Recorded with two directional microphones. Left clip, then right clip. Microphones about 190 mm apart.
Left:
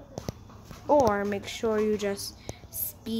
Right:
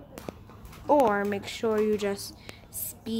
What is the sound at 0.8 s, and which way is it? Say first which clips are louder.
A woman's voice: even; centre (ahead or behind).